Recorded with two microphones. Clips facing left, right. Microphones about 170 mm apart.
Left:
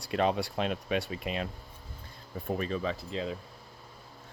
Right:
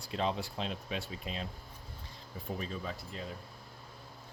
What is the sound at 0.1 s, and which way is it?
Speech, 65° left (ahead or behind).